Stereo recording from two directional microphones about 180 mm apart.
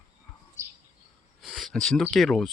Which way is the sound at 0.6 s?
15° right (ahead or behind).